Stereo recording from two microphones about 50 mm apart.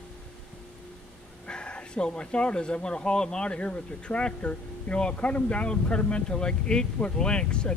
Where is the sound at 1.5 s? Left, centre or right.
Left.